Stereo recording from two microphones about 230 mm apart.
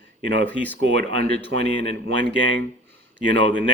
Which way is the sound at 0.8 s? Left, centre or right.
Right.